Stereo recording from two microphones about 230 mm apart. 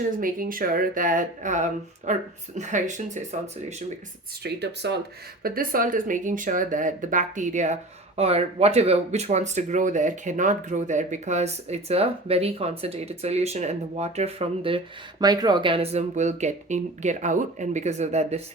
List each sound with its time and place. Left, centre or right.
0.2 s speech: right
4.4 s speech: right